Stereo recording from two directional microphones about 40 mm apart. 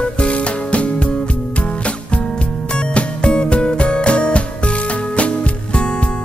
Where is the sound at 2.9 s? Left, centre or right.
Left.